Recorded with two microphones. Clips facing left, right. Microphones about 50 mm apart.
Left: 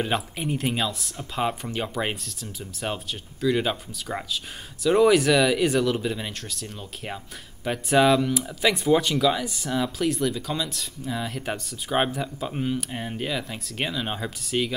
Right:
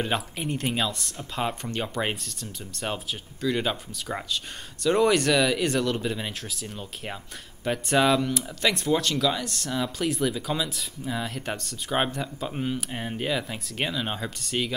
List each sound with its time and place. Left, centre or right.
0.0 s speech: centre